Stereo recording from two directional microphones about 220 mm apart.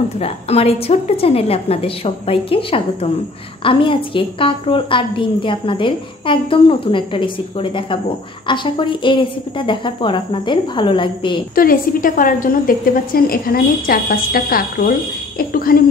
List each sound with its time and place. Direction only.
0.2 s a woman's voice: 25° left (ahead or behind)
11.5 s a woman's voice: 40° left (ahead or behind)